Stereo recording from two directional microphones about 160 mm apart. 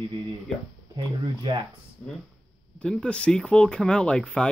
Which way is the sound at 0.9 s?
30° right (ahead or behind).